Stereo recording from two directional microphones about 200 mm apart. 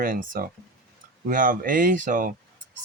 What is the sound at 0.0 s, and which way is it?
Speech, 45° right (ahead or behind).